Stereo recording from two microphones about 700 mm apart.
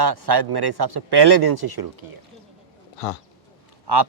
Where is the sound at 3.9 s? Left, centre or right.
Right.